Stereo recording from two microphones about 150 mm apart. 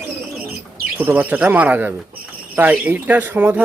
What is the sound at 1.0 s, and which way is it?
Speech, 10° right (ahead or behind).